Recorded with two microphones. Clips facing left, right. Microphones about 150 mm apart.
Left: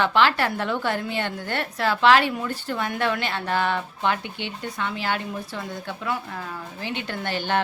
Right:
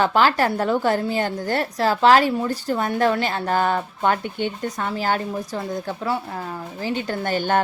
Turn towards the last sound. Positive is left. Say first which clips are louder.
# right 4 dB
turn(degrees=-45)  # may be behind; listen again after turning